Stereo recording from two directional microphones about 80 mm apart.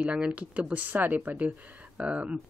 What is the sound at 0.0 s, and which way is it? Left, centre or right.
Speech, centre.